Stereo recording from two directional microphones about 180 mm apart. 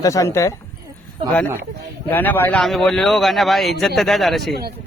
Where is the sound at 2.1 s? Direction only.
10° left (ahead or behind).